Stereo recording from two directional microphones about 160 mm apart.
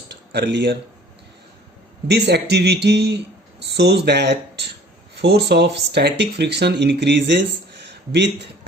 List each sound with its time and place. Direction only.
0.1 s speech: 90° right
2.0 s speech: 90° right